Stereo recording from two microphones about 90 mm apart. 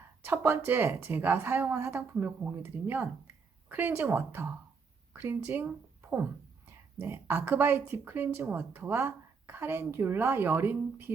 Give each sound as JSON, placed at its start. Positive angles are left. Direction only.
{"t": 0.3, "sound": "speech", "side_deg": -25}